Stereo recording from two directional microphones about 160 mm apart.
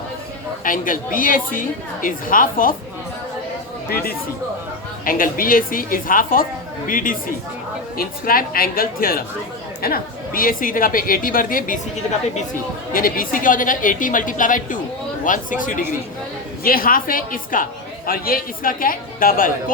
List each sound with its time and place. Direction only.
0.6 s a woman's voice: 60° left (ahead or behind)
3.8 s a woman's voice: 70° left (ahead or behind)
12.9 s a woman's voice: 60° left (ahead or behind)